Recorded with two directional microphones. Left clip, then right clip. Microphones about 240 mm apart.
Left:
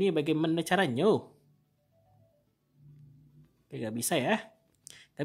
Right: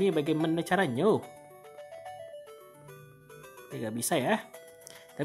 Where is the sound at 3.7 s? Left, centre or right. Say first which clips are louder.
Right 1 dB; centre.